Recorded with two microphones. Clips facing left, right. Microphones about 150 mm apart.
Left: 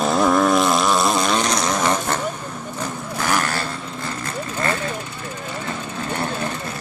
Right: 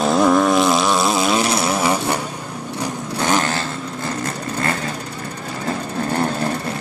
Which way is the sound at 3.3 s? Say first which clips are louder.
Right 3 dB; 20° right (ahead or behind).